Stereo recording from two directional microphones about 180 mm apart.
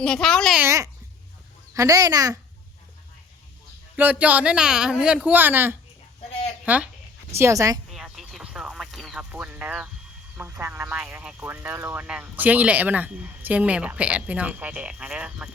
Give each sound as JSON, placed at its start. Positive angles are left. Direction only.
{"t": 0.0, "sound": "speech", "side_deg": 5}
{"t": 0.6, "sound": "speech", "side_deg": -15}
{"t": 3.9, "sound": "speech", "side_deg": -10}
{"t": 7.3, "sound": "speech", "side_deg": -15}
{"t": 7.9, "sound": "a sound", "side_deg": 0}
{"t": 10.3, "sound": "speech", "side_deg": -15}